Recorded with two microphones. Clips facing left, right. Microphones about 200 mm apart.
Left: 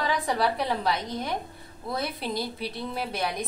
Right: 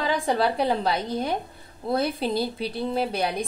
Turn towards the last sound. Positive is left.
turn(degrees=-30)  # may be behind; listen again after turning